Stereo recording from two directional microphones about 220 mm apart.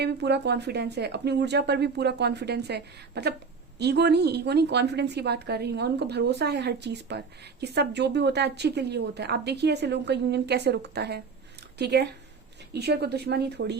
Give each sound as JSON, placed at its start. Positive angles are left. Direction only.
{"t": 0.0, "sound": "a woman's voice", "side_deg": -50}